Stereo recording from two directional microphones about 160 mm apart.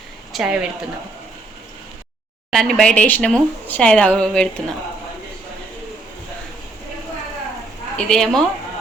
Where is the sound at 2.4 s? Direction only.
Centre (ahead or behind).